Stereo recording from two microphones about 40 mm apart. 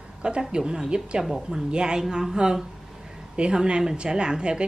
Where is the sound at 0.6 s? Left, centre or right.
Centre.